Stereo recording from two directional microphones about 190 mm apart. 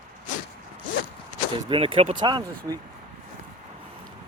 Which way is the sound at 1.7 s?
30° right (ahead or behind).